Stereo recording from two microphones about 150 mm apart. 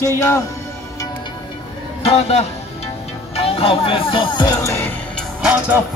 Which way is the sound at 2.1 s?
45° left (ahead or behind).